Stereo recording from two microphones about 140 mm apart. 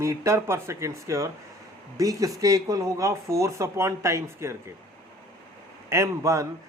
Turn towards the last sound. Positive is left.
turn(degrees=-20)  # may be behind; listen again after turning